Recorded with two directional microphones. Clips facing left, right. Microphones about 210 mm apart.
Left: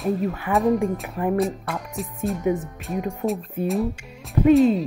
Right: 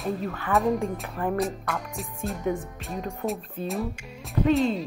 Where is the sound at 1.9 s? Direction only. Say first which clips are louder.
Left 6 dB; centre (ahead or behind).